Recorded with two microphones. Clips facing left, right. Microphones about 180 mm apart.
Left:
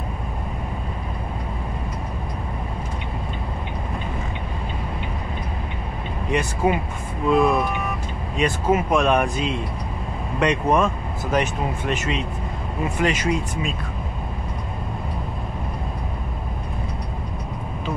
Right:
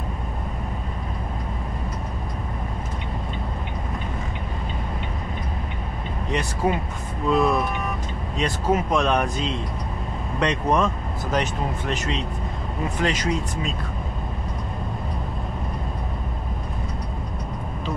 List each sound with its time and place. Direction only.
6.3 s speech: 10° left (ahead or behind)